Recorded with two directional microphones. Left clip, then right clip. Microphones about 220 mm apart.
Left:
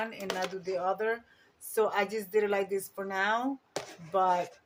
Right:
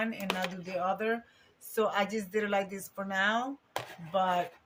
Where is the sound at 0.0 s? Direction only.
25° left (ahead or behind).